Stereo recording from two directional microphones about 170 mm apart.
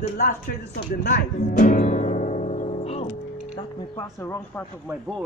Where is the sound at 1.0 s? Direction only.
55° left (ahead or behind).